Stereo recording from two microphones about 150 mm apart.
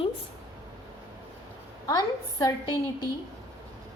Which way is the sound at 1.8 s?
25° left (ahead or behind).